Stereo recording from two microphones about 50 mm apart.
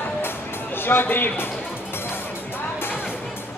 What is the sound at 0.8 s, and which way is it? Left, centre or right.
Speech, left.